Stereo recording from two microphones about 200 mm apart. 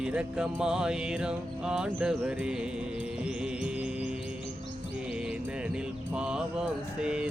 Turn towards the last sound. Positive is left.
turn(degrees=-5)  # may be behind; listen again after turning